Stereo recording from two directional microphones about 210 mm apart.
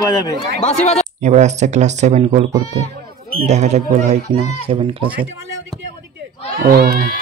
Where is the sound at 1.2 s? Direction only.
35° right (ahead or behind).